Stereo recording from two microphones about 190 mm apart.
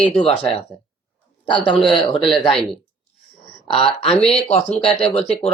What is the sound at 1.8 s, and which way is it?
Speech, centre (ahead or behind).